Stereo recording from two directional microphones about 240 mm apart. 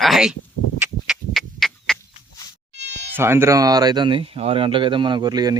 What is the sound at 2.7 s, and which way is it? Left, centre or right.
Sheep, right.